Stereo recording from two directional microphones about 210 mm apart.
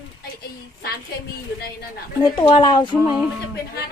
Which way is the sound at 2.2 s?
20° left (ahead or behind).